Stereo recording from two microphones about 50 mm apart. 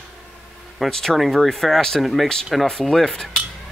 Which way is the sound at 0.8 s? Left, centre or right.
Centre.